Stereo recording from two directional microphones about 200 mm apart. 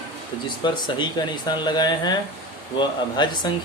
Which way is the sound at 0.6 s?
25° left (ahead or behind).